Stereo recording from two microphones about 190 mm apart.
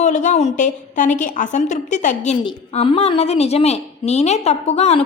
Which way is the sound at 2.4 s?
25° left (ahead or behind).